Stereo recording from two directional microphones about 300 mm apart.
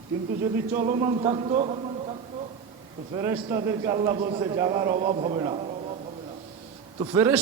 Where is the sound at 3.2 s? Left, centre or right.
Centre.